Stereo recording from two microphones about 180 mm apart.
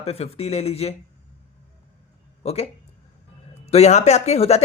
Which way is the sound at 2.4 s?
35° left (ahead or behind).